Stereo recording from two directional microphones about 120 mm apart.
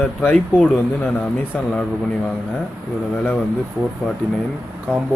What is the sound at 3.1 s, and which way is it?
Speech, 10° left (ahead or behind).